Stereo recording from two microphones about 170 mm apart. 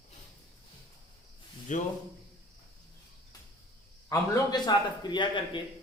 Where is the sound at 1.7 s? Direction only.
45° left (ahead or behind).